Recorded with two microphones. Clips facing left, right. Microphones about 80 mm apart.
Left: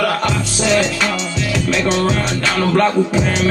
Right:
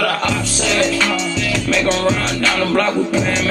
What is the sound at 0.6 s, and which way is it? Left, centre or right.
Music, centre.